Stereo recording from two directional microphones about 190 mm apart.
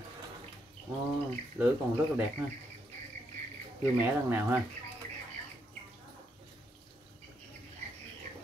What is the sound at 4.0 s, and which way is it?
Speech, 10° right (ahead or behind).